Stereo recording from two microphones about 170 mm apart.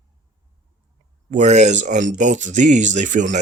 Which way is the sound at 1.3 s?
45° right (ahead or behind).